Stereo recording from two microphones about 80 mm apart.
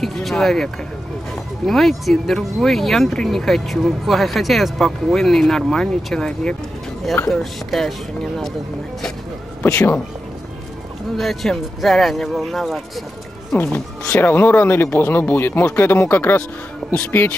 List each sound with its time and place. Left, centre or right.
0.0 s speech: centre
7.7 s speech: centre
9.6 s speech: left
11.1 s speech: centre
14.1 s speech: left